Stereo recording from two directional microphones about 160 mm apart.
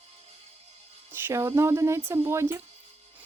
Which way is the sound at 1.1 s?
15° right (ahead or behind).